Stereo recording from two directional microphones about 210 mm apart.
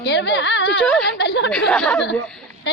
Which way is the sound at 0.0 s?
55° left (ahead or behind).